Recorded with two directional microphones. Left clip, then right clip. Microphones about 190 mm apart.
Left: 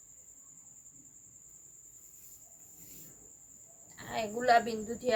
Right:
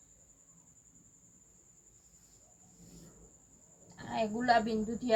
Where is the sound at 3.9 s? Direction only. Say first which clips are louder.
Right 1 dB; 50° left (ahead or behind).